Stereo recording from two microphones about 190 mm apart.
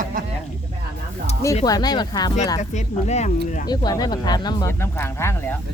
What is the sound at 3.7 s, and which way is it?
Speech, 20° left (ahead or behind).